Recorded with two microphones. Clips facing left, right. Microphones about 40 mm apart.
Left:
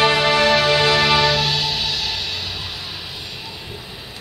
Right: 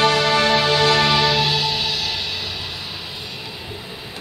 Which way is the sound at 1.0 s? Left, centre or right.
Centre.